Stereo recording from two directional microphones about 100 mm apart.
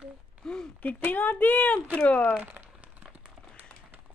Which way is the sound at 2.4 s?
15° right (ahead or behind).